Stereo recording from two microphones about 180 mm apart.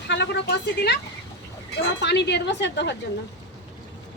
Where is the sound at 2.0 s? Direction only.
70° left (ahead or behind).